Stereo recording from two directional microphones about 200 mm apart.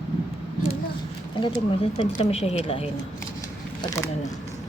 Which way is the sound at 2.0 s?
25° left (ahead or behind).